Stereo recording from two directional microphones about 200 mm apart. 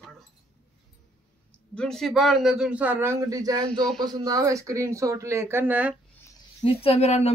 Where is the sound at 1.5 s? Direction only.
5° left (ahead or behind).